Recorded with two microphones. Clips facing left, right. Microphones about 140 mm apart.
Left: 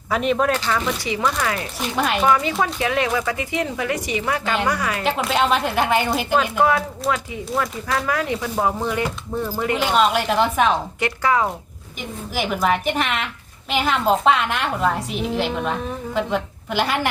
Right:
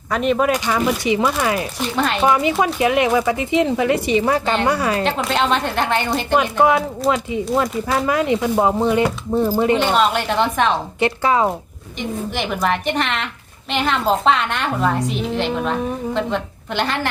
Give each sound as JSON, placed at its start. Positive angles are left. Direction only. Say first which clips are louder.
{"t": 0.1, "sound": "speech", "louder": "right 2 dB", "side_deg": 0}
{"t": 2.0, "sound": "a woman's voice", "louder": "right 1 dB", "side_deg": 5}
{"t": 2.2, "sound": "a woman's voice", "louder": "right 4 dB", "side_deg": -15}
{"t": 5.0, "sound": "a woman's voice", "louder": "right 1 dB", "side_deg": 5}
{"t": 6.3, "sound": "speech", "louder": "right 3 dB", "side_deg": -20}
{"t": 9.7, "sound": "a woman's voice", "louder": "right 2 dB", "side_deg": 0}
{"t": 11.0, "sound": "speech", "louder": "right 4 dB", "side_deg": -25}
{"t": 11.9, "sound": "a woman's voice", "louder": "right 3 dB", "side_deg": 5}